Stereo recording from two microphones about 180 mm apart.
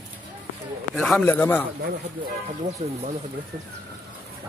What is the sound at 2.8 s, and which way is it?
Speech, 35° right (ahead or behind).